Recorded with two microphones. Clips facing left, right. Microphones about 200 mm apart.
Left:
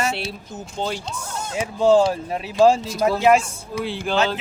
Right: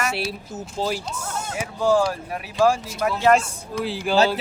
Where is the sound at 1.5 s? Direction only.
25° left (ahead or behind).